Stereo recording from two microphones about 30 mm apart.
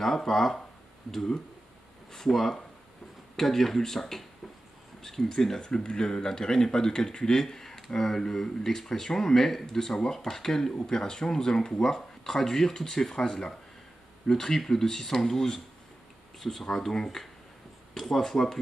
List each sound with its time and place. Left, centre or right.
0.0 s speech: centre
2.1 s speech: centre